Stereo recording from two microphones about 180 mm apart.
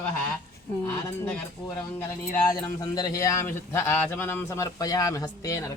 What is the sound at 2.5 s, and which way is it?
Speech, 20° left (ahead or behind).